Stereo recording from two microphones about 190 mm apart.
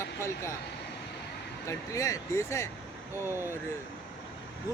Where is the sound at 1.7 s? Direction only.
15° left (ahead or behind).